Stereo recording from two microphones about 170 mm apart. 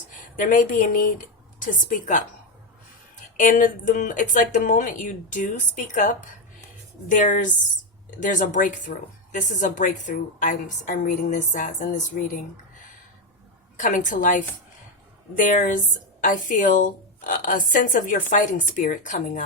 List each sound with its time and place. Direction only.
0.3 s a woman's voice: 50° left (ahead or behind)
7.1 s a woman's voice: 50° left (ahead or behind)
13.7 s a woman's voice: 50° left (ahead or behind)